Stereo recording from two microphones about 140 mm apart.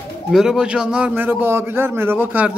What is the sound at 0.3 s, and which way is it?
A man's voice, 5° right (ahead or behind).